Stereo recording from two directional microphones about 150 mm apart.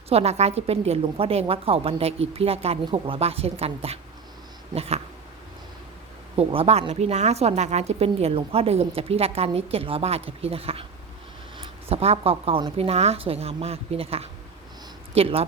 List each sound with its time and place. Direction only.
0.1 s a woman's voice: 45° right (ahead or behind)
6.3 s a woman's voice: 40° right (ahead or behind)